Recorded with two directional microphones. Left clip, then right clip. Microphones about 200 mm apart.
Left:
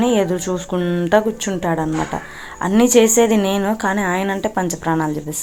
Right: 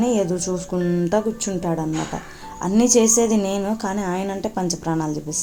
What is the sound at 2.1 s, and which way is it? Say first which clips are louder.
Speech: left 5 dB; 25° left (ahead or behind).